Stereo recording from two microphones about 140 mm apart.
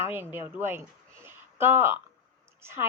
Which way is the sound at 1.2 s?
15° right (ahead or behind).